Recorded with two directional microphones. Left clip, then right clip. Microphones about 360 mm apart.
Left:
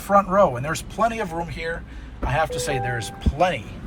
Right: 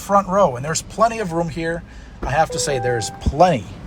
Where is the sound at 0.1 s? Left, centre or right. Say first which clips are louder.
Right 1 dB; centre.